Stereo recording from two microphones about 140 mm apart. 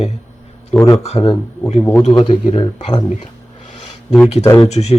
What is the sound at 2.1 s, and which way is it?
Speech, 35° left (ahead or behind).